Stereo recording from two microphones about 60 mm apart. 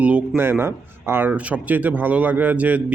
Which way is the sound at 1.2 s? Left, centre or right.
Right.